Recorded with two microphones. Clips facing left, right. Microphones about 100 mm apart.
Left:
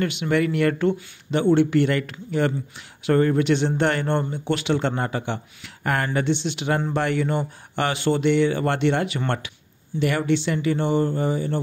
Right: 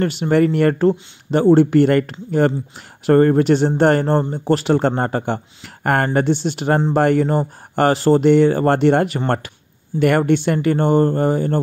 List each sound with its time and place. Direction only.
0.0 s speech: 40° right (ahead or behind)